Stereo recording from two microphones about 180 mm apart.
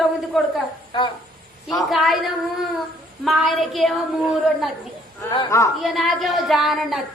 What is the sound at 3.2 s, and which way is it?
A woman's voice, centre (ahead or behind).